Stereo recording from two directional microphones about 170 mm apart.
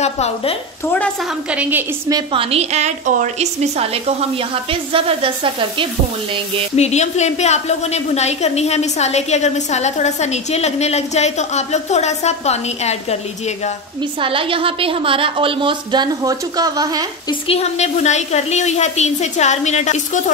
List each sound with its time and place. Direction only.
0.0 s a woman's voice: 40° left (ahead or behind)
1.5 s a woman's voice: 10° right (ahead or behind)
2.1 s a woman's voice: 35° right (ahead or behind)
6.7 s a woman's voice: 40° left (ahead or behind)
14.2 s a woman's voice: 30° right (ahead or behind)
17.3 s a woman's voice: 35° left (ahead or behind)